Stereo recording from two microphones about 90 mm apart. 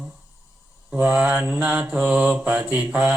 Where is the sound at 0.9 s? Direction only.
15° right (ahead or behind).